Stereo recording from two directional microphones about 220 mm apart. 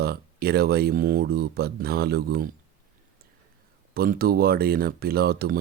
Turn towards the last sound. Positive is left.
turn(degrees=-45)  # may be behind; listen again after turning